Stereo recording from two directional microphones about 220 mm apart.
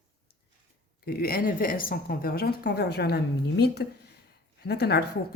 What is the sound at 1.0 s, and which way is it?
Speech, 45° left (ahead or behind).